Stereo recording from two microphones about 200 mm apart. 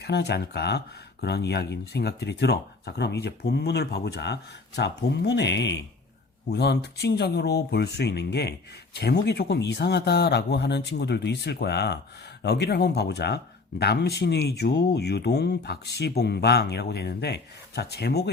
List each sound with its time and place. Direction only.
0.0 s speech: 55° left (ahead or behind)